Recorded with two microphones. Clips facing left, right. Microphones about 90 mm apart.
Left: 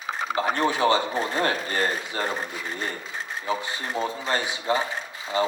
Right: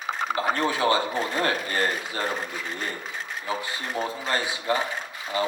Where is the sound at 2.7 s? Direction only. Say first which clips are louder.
Left 1 dB; 30° left (ahead or behind).